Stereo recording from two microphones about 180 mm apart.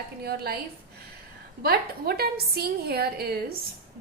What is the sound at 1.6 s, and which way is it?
A woman's voice, 60° right (ahead or behind).